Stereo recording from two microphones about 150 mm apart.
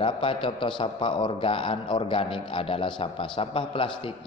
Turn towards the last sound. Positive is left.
turn(degrees=35)  # may be behind; listen again after turning